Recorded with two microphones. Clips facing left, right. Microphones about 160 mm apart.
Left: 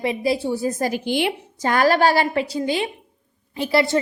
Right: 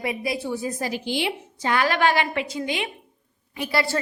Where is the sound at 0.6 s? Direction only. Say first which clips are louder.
Left 5 dB; 50° left (ahead or behind).